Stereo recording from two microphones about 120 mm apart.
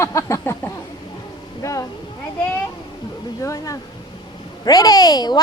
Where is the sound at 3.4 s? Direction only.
25° left (ahead or behind).